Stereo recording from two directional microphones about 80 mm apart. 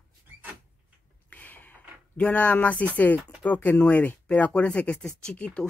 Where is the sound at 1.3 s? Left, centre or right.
Left.